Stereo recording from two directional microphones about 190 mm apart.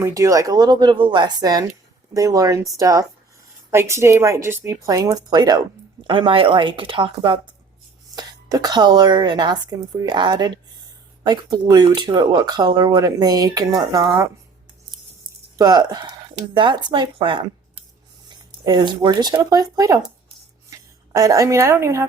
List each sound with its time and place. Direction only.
0.0 s a woman's voice: 15° right (ahead or behind)
15.5 s a woman's voice: 20° right (ahead or behind)